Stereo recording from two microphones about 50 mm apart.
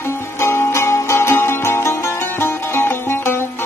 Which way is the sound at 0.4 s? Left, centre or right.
Left.